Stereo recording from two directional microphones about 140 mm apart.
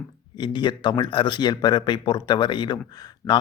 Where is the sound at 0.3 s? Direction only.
35° left (ahead or behind).